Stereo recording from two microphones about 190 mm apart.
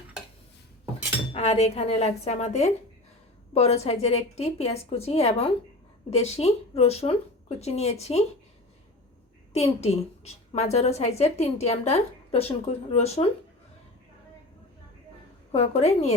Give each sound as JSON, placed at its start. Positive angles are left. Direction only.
{"t": 1.3, "sound": "speech", "side_deg": 35}
{"t": 9.5, "sound": "speech", "side_deg": 35}
{"t": 15.5, "sound": "speech", "side_deg": 35}